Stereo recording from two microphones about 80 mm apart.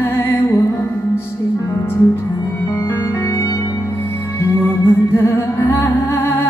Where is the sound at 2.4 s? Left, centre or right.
Left.